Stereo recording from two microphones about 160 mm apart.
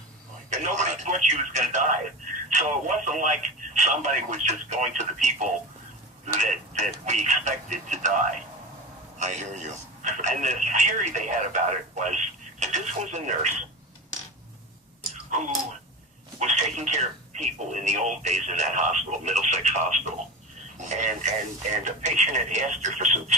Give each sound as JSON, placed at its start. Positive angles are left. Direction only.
{"t": 0.5, "sound": "speech", "side_deg": -50}
{"t": 6.7, "sound": "speech", "side_deg": -50}
{"t": 15.3, "sound": "speech", "side_deg": -50}